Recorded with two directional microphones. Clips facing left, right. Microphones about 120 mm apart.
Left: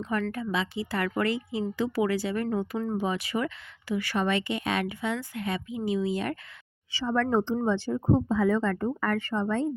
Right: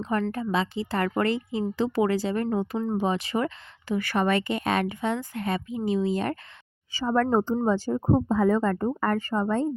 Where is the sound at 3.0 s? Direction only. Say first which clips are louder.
Right 3 dB; 35° right (ahead or behind).